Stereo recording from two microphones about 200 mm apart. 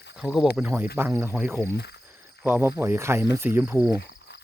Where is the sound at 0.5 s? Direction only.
10° right (ahead or behind).